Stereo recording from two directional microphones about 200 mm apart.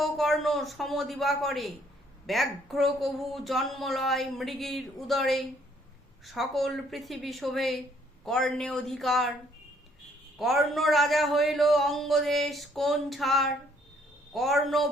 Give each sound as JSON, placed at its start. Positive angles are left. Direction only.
{"t": 0.0, "sound": "a woman's voice", "side_deg": 0}
{"t": 10.3, "sound": "a woman's voice", "side_deg": 0}